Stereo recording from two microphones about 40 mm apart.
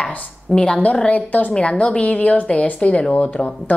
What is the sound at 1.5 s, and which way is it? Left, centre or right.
A woman's voice, left.